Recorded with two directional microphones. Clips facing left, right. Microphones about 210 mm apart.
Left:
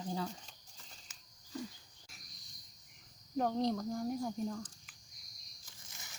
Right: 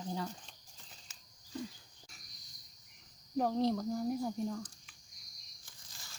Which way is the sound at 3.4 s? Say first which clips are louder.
Right 2 dB; centre (ahead or behind).